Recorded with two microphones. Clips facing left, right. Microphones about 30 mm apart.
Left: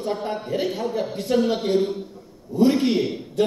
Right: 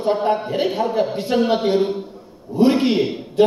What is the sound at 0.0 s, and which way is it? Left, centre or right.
A man's voice, right.